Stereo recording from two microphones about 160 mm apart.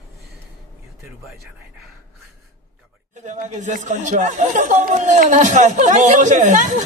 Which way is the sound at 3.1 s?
50° right (ahead or behind).